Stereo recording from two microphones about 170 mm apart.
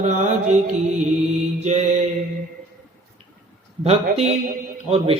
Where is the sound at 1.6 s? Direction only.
40° right (ahead or behind).